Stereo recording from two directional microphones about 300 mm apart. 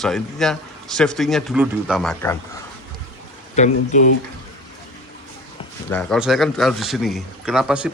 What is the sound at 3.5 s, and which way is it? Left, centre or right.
Speech, left.